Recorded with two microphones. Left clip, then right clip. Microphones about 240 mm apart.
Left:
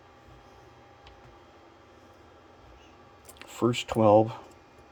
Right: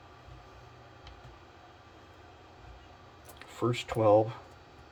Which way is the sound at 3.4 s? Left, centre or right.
Left.